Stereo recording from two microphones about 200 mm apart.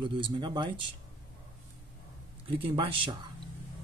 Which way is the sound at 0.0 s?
25° right (ahead or behind).